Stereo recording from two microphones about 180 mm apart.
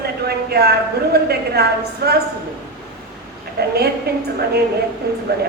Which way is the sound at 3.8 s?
60° right (ahead or behind).